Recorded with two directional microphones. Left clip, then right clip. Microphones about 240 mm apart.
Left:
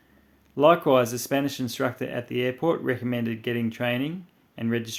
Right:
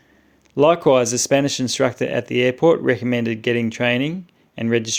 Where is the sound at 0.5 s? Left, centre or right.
Right.